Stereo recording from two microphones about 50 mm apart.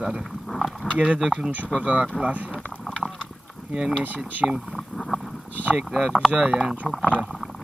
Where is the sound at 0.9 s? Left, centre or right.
Right.